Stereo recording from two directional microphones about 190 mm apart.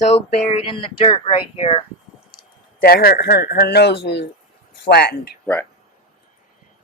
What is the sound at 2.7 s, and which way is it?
Speech, 50° left (ahead or behind).